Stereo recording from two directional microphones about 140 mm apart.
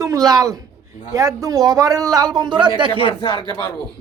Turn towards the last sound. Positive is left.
turn(degrees=35)  # may be behind; listen again after turning